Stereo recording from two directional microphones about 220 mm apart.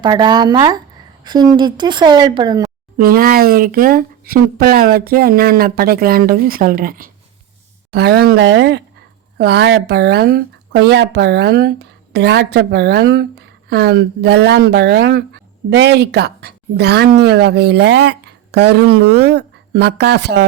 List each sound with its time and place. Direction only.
0.0 s speech: 20° right (ahead or behind)
3.0 s a woman's voice: 40° right (ahead or behind)